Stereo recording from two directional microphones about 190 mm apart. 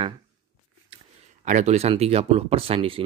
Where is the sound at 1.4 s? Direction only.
40° right (ahead or behind).